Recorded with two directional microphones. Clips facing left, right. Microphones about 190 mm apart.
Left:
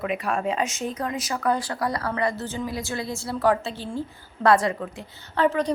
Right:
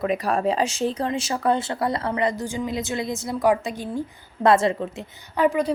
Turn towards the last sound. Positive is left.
turn(degrees=-10)  # may be behind; listen again after turning